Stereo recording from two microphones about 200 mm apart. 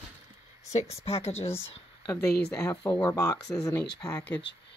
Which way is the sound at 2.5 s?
20° left (ahead or behind).